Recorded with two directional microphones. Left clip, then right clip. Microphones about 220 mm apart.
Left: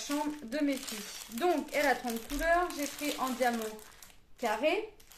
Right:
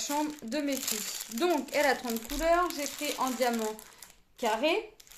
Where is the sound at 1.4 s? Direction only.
45° right (ahead or behind).